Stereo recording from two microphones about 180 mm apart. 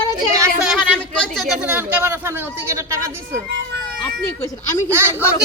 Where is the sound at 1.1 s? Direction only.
5° left (ahead or behind); by 3.4 s 15° right (ahead or behind).